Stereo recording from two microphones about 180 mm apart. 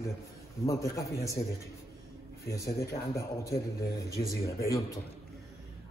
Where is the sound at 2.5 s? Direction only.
15° left (ahead or behind).